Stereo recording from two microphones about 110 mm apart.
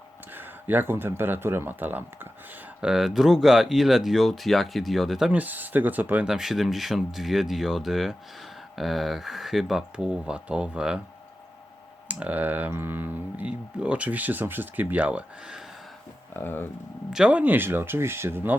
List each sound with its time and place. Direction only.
0.3 s speech: 20° right (ahead or behind)
2.8 s speech: 5° right (ahead or behind)
12.0 s speech: 15° right (ahead or behind)
16.3 s speech: 20° left (ahead or behind)
17.1 s speech: 10° right (ahead or behind)